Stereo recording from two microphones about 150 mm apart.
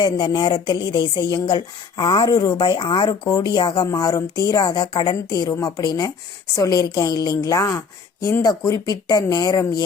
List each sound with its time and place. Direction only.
0.0 s speech: 30° left (ahead or behind)